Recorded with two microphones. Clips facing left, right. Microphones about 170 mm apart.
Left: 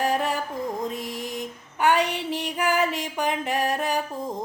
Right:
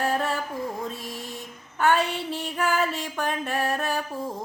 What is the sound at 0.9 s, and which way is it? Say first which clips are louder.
Mantra: left 4 dB; 15° left (ahead or behind).